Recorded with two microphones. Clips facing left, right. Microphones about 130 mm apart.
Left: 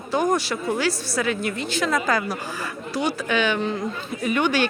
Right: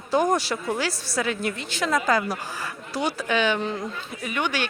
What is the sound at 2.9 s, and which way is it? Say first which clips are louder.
Speech: left 1 dB; 35° right (ahead or behind).